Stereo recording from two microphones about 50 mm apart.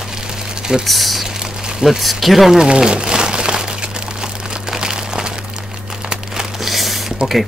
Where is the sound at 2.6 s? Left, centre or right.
Centre.